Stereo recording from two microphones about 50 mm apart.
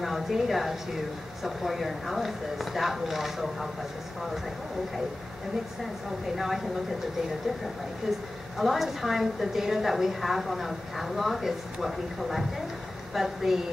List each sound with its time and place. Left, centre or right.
0.0 s a woman's voice: centre
6.2 s a woman's voice: centre
8.5 s a woman's voice: centre